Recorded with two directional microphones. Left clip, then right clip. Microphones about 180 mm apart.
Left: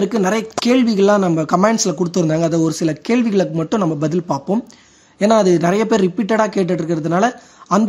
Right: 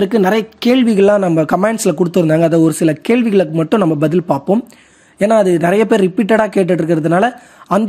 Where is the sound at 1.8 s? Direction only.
15° right (ahead or behind).